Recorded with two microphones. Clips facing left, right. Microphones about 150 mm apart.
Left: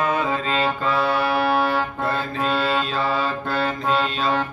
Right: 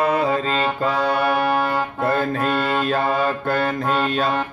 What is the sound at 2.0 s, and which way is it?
Music, 50° right (ahead or behind).